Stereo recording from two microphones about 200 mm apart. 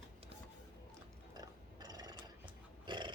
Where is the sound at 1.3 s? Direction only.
20° right (ahead or behind).